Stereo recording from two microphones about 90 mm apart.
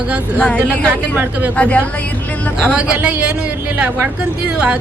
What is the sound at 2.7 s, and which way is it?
Speech, 15° right (ahead or behind).